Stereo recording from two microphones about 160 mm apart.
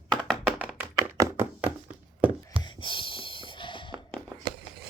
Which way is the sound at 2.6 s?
30° left (ahead or behind).